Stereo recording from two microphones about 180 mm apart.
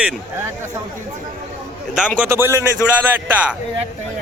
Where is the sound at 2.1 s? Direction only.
10° right (ahead or behind).